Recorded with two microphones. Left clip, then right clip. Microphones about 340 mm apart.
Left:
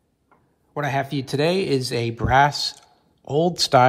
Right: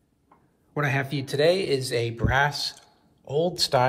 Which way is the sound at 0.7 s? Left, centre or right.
Centre.